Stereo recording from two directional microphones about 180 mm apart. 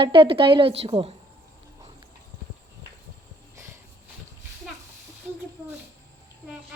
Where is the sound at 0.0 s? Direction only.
30° right (ahead or behind).